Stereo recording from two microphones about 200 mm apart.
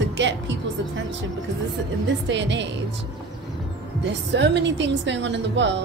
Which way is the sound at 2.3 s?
65° right (ahead or behind).